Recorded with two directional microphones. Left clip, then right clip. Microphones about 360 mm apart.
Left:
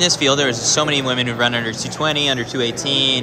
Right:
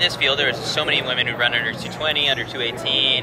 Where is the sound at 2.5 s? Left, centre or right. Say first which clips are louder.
Left 2 dB; centre.